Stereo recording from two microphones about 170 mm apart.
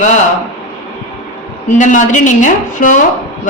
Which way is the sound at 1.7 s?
50° left (ahead or behind).